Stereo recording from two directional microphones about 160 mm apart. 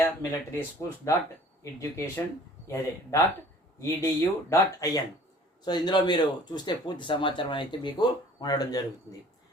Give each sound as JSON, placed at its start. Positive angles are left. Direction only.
{"t": 0.0, "sound": "speech", "side_deg": 20}